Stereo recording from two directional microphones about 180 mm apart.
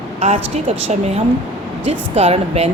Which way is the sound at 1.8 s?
35° right (ahead or behind).